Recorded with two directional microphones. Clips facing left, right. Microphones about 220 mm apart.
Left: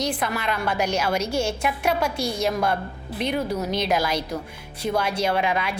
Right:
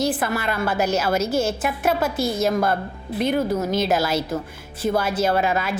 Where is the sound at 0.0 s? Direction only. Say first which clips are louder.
Right 3 dB; 5° right (ahead or behind).